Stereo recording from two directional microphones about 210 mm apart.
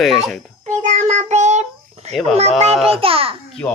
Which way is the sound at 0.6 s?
35° right (ahead or behind).